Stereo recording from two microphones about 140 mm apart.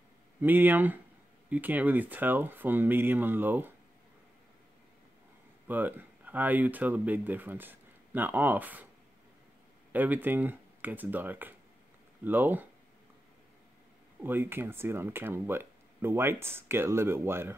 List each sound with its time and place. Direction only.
0.4 s speech: 15° right (ahead or behind)
5.7 s speech: 15° right (ahead or behind)
9.9 s speech: 10° right (ahead or behind)
14.2 s speech: 15° right (ahead or behind)